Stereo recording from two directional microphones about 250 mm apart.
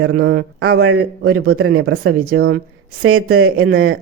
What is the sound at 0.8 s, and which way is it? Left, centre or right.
Speech, right.